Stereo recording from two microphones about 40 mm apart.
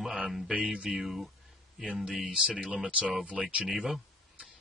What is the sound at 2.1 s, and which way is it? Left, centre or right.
Speech, right.